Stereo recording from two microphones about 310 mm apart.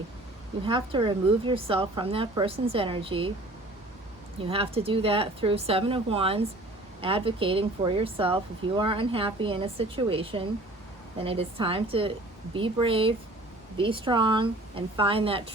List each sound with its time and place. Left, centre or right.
0.6 s speech: centre
4.4 s speech: centre